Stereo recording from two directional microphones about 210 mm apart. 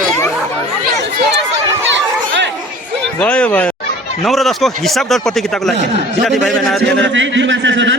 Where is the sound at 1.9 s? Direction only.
60° right (ahead or behind).